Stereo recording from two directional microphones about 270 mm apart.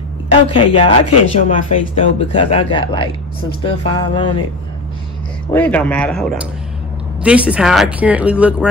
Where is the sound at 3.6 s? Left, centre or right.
Centre.